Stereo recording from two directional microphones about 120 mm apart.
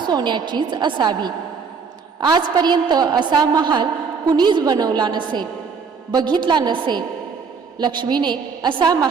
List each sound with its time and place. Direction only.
0.1 s a woman's voice: 40° right (ahead or behind)